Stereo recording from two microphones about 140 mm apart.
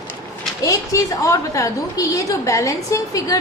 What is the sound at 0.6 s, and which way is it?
A woman's voice, 25° left (ahead or behind).